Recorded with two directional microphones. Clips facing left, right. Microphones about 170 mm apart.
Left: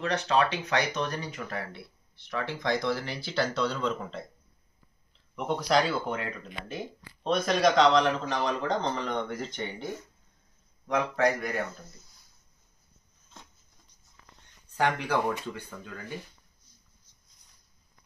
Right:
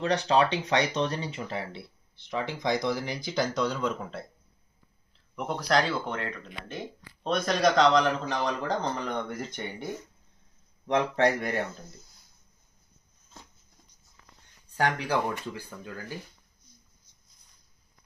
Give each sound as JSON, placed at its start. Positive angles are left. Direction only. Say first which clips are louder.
{"t": 0.0, "sound": "speech", "louder": "right 2 dB", "side_deg": -35}
{"t": 5.3, "sound": "a man's voice", "louder": "left 1 dB", "side_deg": 0}
{"t": 10.9, "sound": "a man's voice", "louder": "right 2 dB", "side_deg": -30}
{"t": 14.9, "sound": "a man's voice", "louder": "left 1 dB", "side_deg": 0}